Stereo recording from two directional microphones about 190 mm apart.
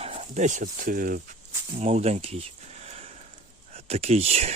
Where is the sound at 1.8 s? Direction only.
35° right (ahead or behind).